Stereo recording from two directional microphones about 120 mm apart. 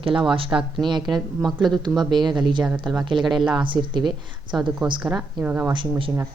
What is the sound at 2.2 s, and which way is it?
Speech, 40° right (ahead or behind).